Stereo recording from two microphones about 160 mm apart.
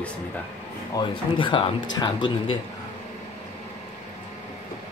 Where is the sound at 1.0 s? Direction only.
30° left (ahead or behind).